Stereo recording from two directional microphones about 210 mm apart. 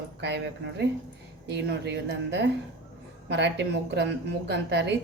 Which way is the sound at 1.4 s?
55° right (ahead or behind).